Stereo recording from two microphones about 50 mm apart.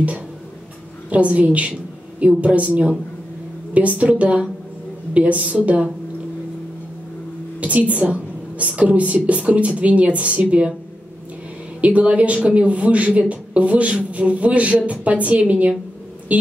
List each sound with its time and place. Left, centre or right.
1.1 s a woman's voice: right
7.6 s a woman's voice: right
11.8 s a woman's voice: right